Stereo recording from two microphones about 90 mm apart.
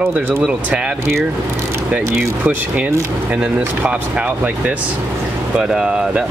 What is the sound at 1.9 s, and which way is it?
Speech, 15° right (ahead or behind).